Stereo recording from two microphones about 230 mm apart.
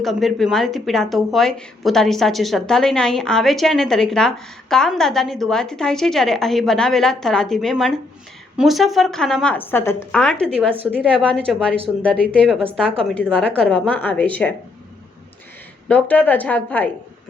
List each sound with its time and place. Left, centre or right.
0.0 s speech: centre
15.9 s a woman's voice: centre